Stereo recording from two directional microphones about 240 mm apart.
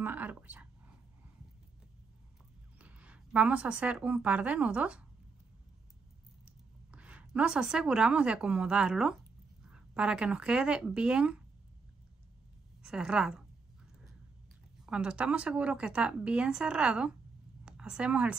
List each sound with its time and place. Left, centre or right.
0.0 s speech: centre
2.8 s a woman's voice: centre
6.4 s speech: centre
12.8 s speech: centre
14.9 s speech: centre